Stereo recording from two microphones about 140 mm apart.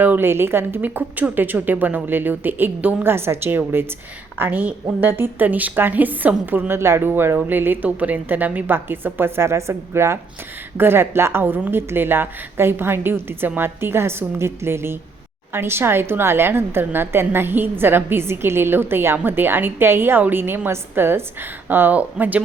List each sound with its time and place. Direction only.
0.0 s a woman's voice: 15° right (ahead or behind)